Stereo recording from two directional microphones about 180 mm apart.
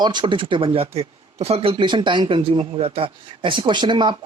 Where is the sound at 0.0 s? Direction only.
25° right (ahead or behind).